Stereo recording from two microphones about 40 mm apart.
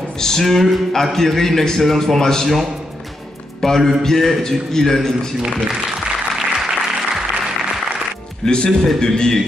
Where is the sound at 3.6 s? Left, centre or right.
Centre.